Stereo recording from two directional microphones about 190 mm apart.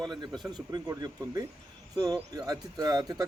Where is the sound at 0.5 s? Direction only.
20° right (ahead or behind).